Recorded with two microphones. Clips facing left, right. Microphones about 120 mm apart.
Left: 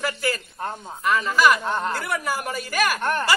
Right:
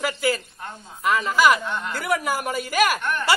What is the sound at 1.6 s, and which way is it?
Speech, 35° left (ahead or behind).